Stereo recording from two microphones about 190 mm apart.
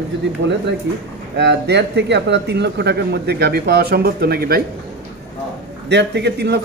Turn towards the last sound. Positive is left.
turn(degrees=-60)  # may be behind; listen again after turning